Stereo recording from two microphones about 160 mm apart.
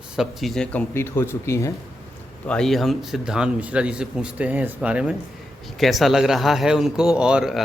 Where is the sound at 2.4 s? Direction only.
5° left (ahead or behind).